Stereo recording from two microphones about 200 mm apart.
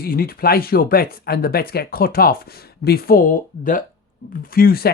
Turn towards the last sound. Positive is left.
turn(degrees=50)  # may be behind; listen again after turning